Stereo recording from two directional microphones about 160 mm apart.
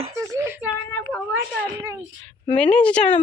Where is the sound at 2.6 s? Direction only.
10° left (ahead or behind).